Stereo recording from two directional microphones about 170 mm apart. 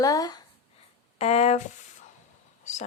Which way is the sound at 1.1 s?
40° left (ahead or behind).